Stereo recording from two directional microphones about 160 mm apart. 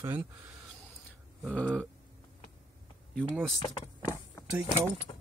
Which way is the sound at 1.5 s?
5° left (ahead or behind).